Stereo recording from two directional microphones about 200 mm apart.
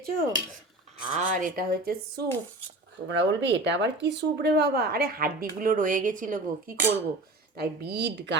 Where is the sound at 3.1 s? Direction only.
60° right (ahead or behind).